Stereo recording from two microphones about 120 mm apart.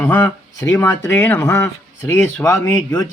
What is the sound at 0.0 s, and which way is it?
A man's voice, 20° left (ahead or behind).